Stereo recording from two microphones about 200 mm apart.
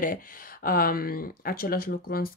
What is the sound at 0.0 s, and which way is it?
Speech, 45° left (ahead or behind).